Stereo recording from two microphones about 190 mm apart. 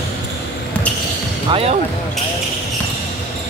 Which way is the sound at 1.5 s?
30° right (ahead or behind).